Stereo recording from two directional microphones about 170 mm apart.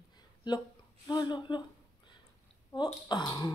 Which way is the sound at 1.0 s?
25° left (ahead or behind).